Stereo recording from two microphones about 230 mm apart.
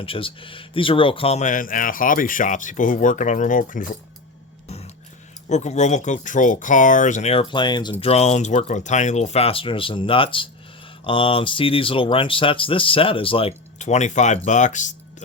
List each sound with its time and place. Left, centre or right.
0.0 s speech: left
5.5 s speech: left